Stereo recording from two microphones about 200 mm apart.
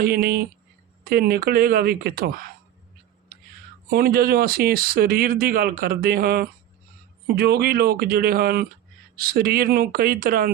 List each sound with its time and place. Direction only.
0.0 s speech: 50° right (ahead or behind)
3.3 s a sound: 50° right (ahead or behind)
3.8 s speech: 50° right (ahead or behind)